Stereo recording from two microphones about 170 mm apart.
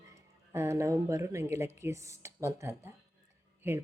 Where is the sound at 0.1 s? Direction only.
15° right (ahead or behind).